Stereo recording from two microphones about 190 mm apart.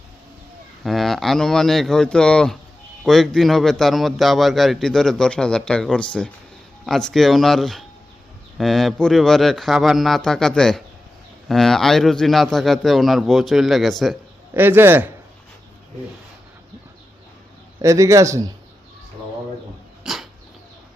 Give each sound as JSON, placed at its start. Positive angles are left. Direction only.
{"t": 0.9, "sound": "a man's voice", "side_deg": 0}
{"t": 14.5, "sound": "speech", "side_deg": -10}
{"t": 17.8, "sound": "speech", "side_deg": -15}
{"t": 20.1, "sound": "a sound", "side_deg": -5}